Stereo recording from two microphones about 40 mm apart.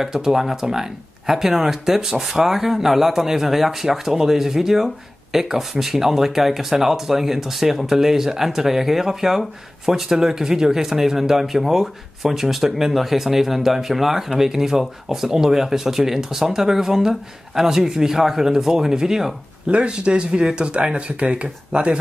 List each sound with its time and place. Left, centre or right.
0.0 s speech: centre
19.7 s speech: right